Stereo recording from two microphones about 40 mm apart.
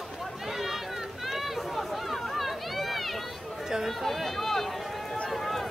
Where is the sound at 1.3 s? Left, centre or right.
Centre.